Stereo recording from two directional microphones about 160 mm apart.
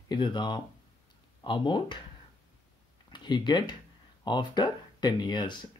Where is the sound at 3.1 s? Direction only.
30° left (ahead or behind).